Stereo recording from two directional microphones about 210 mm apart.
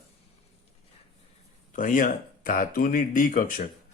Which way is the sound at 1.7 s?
40° left (ahead or behind).